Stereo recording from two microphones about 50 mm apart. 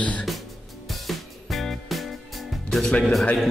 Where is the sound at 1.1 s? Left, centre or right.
Centre.